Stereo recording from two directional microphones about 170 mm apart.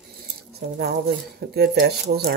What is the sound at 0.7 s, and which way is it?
Speech, 70° right (ahead or behind).